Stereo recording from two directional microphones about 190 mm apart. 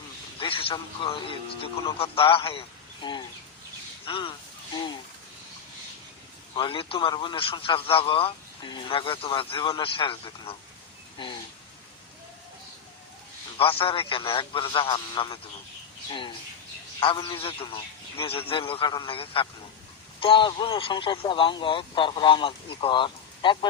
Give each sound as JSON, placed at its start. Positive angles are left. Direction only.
{"t": 0.3, "sound": "a man's voice", "side_deg": 30}
{"t": 6.5, "sound": "a man's voice", "side_deg": 30}
{"t": 13.6, "sound": "a man's voice", "side_deg": 30}
{"t": 17.0, "sound": "a man's voice", "side_deg": 25}